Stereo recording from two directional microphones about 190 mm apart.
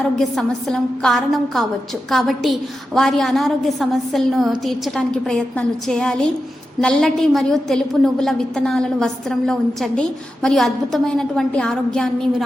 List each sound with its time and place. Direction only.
0.2 s a woman's voice: centre (ahead or behind)